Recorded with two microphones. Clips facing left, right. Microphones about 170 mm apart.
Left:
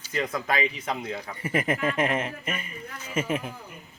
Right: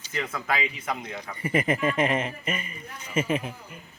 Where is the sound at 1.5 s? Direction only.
10° right (ahead or behind).